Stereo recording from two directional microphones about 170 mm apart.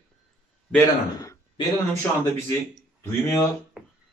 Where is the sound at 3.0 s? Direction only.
15° left (ahead or behind).